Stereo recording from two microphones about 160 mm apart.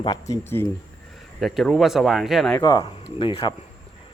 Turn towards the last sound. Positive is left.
turn(degrees=35)  # may be behind; listen again after turning